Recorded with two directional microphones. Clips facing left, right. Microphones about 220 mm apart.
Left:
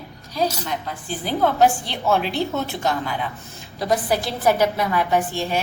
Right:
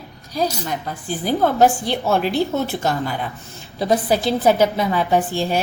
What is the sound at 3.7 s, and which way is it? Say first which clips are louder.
A woman's voice: right 3 dB; 25° right (ahead or behind).